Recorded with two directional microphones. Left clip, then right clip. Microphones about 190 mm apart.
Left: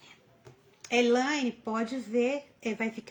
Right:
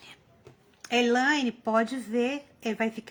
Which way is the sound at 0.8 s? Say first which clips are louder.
Right 2 dB; 40° right (ahead or behind).